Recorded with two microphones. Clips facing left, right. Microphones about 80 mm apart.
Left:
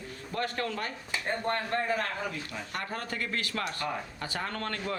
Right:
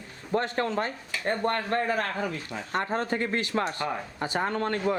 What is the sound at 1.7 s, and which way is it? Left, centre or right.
Speech, right.